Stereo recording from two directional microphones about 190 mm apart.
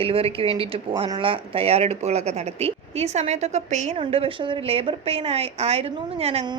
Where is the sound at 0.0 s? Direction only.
30° right (ahead or behind).